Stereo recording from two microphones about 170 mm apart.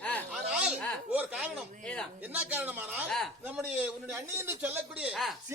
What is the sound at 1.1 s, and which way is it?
Chuckle, 10° right (ahead or behind).